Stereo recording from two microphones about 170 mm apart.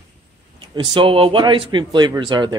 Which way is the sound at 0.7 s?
30° right (ahead or behind).